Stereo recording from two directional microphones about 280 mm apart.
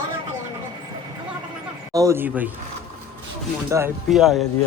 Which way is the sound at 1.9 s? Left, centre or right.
Centre.